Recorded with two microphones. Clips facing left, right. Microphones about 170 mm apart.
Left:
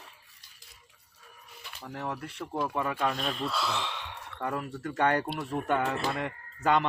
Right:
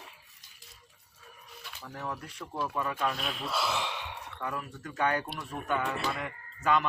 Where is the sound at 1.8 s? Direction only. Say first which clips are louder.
Left 3 dB; 30° left (ahead or behind).